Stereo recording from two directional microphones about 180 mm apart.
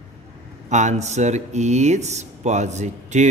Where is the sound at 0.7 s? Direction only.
40° right (ahead or behind).